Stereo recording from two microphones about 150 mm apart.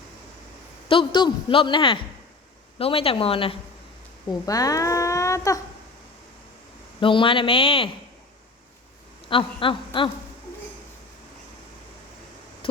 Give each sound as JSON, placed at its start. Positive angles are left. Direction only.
{"t": 0.9, "sound": "a woman's voice", "side_deg": 35}
{"t": 4.3, "sound": "speech", "side_deg": 25}
{"t": 7.0, "sound": "a woman's voice", "side_deg": 35}
{"t": 9.3, "sound": "a woman's voice", "side_deg": 35}